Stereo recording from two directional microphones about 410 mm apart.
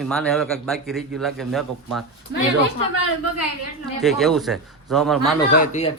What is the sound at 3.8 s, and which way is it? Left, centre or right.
A man's voice, centre.